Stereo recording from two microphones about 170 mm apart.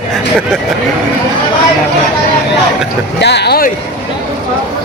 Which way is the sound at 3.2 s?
80° left.